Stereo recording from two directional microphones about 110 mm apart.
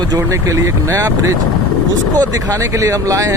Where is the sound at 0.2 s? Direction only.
25° right (ahead or behind).